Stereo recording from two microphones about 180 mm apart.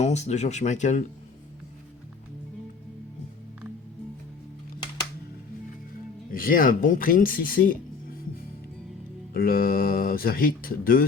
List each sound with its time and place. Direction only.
0.0 s speech: 40° left (ahead or behind)
6.3 s speech: 50° left (ahead or behind)
9.3 s speech: 55° left (ahead or behind)